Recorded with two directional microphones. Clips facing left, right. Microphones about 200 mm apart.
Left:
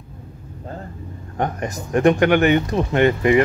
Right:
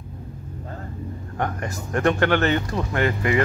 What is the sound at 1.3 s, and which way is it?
Speech, 20° left (ahead or behind).